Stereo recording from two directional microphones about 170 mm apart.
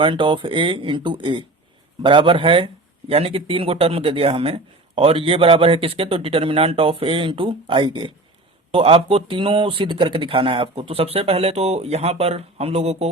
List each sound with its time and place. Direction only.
0.0 s a man's voice: 30° right (ahead or behind)